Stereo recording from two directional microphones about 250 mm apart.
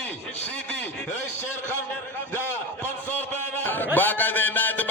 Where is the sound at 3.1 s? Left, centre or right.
Centre.